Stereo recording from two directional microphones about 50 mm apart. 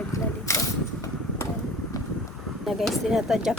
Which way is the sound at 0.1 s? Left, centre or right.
Left.